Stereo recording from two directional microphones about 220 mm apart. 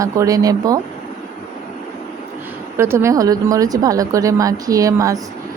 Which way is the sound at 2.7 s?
10° right (ahead or behind).